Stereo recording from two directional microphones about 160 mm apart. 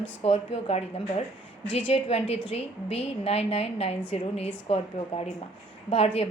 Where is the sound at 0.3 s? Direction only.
40° left (ahead or behind).